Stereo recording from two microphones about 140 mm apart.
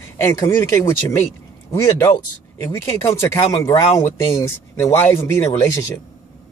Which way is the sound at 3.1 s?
20° left (ahead or behind).